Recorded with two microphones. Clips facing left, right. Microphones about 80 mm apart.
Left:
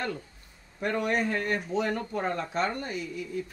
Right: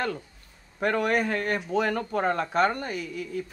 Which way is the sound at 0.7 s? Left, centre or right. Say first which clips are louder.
Right 3 dB; right.